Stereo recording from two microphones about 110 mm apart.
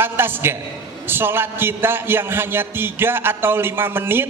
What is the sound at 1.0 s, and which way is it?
A man's voice, 20° right (ahead or behind).